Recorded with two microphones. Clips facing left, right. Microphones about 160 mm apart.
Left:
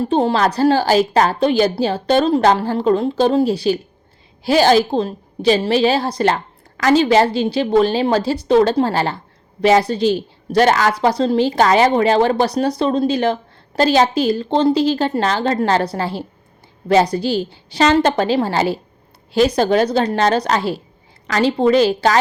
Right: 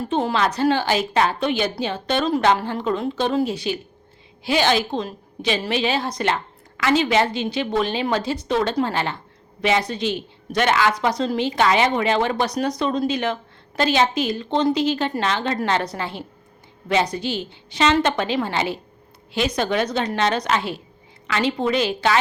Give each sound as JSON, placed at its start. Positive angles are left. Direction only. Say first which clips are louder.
{"t": 0.0, "sound": "a woman's voice", "louder": "left 5 dB", "side_deg": 30}